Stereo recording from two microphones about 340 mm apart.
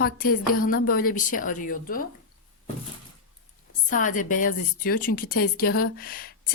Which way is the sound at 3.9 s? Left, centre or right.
Left.